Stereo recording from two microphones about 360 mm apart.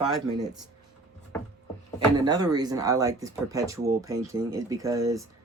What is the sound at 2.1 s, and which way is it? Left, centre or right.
Speech, centre.